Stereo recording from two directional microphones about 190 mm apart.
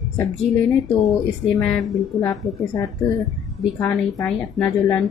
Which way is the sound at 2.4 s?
15° left (ahead or behind).